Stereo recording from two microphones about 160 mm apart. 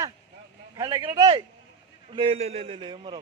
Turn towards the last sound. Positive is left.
turn(degrees=-30)  # may be behind; listen again after turning